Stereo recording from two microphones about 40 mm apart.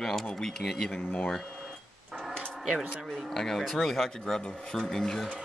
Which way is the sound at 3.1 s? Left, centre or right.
Centre.